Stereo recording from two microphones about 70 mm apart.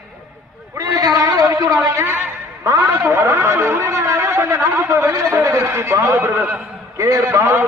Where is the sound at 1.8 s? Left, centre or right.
Right.